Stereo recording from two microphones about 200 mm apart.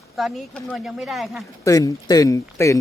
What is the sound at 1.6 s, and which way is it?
Speech, 15° left (ahead or behind).